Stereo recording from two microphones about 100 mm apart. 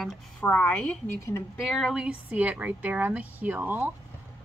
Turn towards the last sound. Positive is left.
turn(degrees=-20)  # may be behind; listen again after turning